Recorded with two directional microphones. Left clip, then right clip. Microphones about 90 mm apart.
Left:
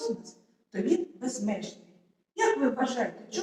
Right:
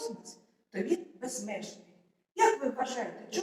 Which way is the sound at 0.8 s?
40° right (ahead or behind).